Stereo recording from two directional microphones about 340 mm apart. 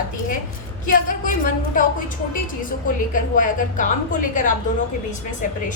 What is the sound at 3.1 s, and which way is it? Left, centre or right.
A woman's voice, left.